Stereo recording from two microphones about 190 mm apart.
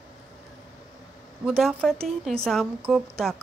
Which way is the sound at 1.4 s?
Centre (ahead or behind).